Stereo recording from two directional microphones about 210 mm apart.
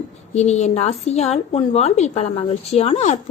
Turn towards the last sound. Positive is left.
turn(degrees=30)  # may be behind; listen again after turning